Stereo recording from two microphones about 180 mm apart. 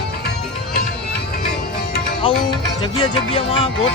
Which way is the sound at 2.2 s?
30° left (ahead or behind).